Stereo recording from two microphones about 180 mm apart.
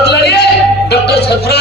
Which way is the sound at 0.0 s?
65° left (ahead or behind).